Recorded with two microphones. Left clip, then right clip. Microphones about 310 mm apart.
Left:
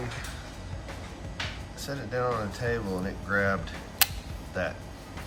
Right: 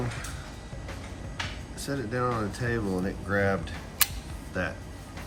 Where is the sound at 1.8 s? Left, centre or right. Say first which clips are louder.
Right 1 dB; centre.